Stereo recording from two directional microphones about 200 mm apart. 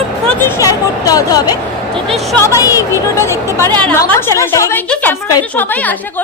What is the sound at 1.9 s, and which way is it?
Speech, centre (ahead or behind).